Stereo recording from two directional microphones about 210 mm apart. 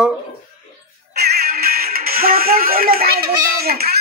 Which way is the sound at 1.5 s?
45° right (ahead or behind).